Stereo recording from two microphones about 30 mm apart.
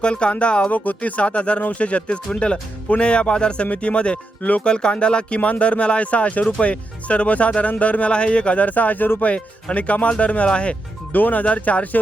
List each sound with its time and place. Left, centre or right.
0.0 s speech: left
0.7 s speech: left
1.2 s speech: left
5.4 s speech: left
8.1 s speech: left
8.6 s speech: left
9.7 s speech: left
11.1 s speech: left
11.4 s speech: left